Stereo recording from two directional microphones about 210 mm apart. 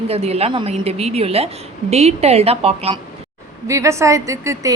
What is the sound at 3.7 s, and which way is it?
A woman's voice, 15° right (ahead or behind).